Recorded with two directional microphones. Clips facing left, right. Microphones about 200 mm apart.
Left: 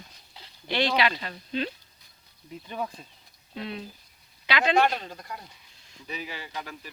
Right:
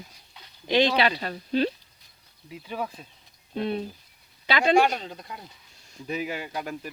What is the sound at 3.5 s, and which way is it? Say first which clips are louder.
Speech: right 8 dB; 50° right (ahead or behind).